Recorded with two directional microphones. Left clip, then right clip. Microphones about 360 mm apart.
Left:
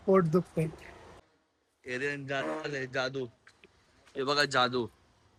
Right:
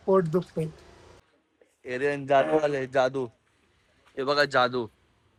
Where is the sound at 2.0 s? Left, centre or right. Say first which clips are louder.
Right 12 dB; centre.